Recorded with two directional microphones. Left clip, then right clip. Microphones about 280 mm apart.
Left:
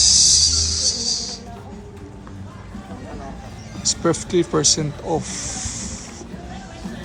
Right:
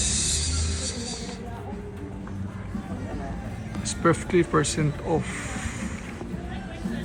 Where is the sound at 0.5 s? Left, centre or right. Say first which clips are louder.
Left 12 dB; centre.